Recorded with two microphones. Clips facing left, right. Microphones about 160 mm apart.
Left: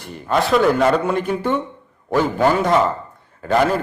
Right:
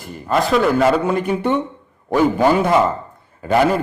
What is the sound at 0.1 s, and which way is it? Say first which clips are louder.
A man's voice: even; centre (ahead or behind).